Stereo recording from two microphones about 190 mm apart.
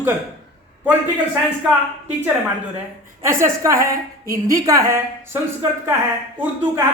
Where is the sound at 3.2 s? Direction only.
15° right (ahead or behind).